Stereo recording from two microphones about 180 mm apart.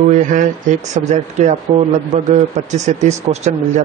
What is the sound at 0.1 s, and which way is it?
A man's voice, 45° right (ahead or behind).